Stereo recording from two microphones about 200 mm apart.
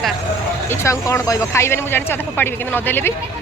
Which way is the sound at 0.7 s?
15° left (ahead or behind).